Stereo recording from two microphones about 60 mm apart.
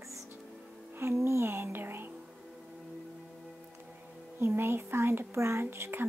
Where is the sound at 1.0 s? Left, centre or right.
Right.